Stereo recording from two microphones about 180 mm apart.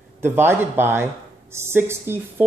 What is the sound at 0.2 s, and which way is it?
A woman's voice, 15° right (ahead or behind).